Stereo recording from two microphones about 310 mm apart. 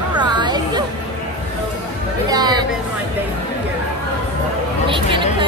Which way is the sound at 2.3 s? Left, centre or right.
Centre.